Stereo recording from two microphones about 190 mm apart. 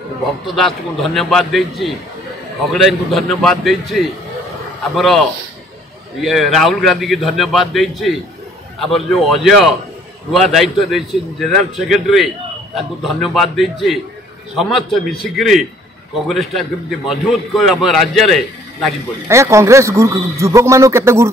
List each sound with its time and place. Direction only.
0.6 s a man's voice: centre (ahead or behind)
19.2 s a man's voice: 15° right (ahead or behind)